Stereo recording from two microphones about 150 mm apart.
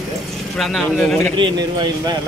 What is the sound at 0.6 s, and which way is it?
Speech, centre (ahead or behind).